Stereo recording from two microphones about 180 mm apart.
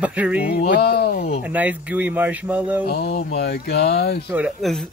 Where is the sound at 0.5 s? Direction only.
65° left (ahead or behind).